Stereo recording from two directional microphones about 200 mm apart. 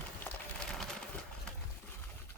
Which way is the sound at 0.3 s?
5° left (ahead or behind).